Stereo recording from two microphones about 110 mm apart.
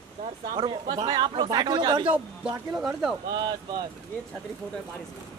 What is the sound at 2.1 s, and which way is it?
Speech, 5° right (ahead or behind).